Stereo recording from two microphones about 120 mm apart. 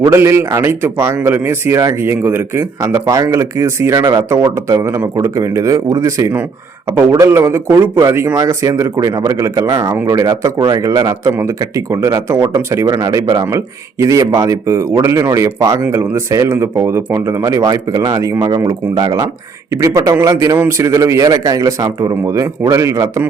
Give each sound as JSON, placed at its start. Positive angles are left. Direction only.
{"t": 0.0, "sound": "speech", "side_deg": -20}